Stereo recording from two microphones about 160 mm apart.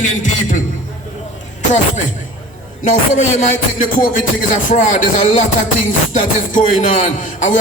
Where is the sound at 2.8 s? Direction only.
50° left (ahead or behind).